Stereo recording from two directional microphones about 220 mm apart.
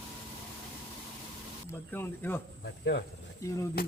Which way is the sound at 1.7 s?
10° left (ahead or behind).